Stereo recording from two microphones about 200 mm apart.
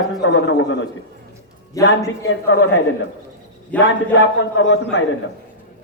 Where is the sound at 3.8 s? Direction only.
70° left (ahead or behind).